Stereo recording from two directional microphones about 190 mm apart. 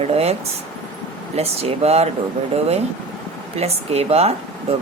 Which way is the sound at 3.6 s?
35° right (ahead or behind).